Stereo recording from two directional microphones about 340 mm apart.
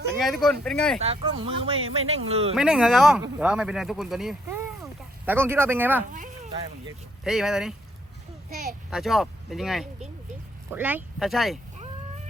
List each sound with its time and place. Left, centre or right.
0.2 s speech: centre
0.9 s speech: centre
2.6 s speech: centre
6.1 s sheep: right
7.3 s speech: centre
8.4 s a sound: right
8.9 s speech: centre